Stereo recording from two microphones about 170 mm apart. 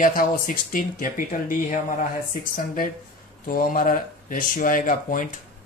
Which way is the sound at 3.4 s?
55° left (ahead or behind).